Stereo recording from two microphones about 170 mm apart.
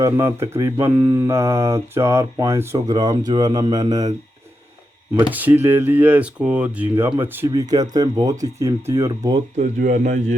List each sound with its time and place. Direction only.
0.0 s speech: 15° right (ahead or behind)
5.3 s speech: 10° right (ahead or behind)
9.6 s speech: 45° right (ahead or behind)